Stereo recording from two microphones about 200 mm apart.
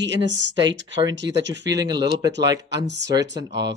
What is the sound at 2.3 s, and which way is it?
Speech, 60° right (ahead or behind).